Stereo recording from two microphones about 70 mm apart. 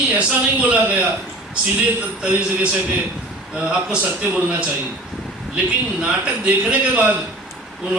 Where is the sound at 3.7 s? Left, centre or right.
Centre.